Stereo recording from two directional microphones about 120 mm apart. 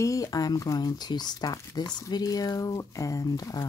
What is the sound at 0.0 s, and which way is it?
Speech, 30° left (ahead or behind).